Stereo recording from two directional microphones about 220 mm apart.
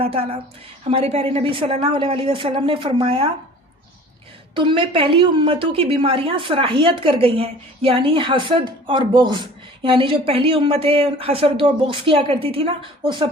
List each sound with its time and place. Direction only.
0.0 s a woman's voice: 25° right (ahead or behind)
4.5 s a woman's voice: 20° right (ahead or behind)